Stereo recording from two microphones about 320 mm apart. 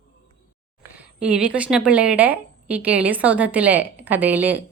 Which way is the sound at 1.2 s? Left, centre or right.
Centre.